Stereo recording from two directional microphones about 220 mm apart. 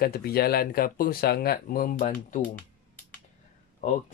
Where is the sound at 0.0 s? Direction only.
45° left (ahead or behind).